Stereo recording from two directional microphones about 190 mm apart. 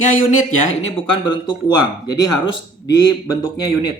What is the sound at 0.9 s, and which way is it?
Speech, 25° left (ahead or behind).